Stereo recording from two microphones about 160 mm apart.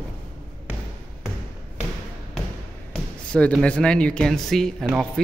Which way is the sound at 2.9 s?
5° left (ahead or behind).